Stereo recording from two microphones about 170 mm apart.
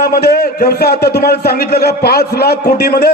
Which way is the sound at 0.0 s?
70° left (ahead or behind).